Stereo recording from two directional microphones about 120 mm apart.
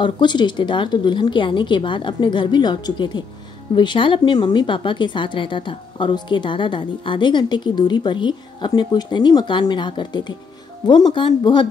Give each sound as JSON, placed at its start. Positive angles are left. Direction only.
{"t": 0.0, "sound": "speech", "side_deg": 40}